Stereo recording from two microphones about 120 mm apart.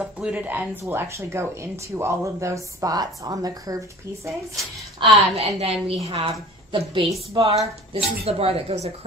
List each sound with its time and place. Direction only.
0.0 s speech: 10° right (ahead or behind); by 4.3 s 30° right (ahead or behind)
5.3 s a woman's voice: 60° right (ahead or behind); by 7.1 s 45° right (ahead or behind)
7.3 s speech: 55° right (ahead or behind)